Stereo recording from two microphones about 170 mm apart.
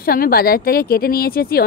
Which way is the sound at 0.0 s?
60° left (ahead or behind).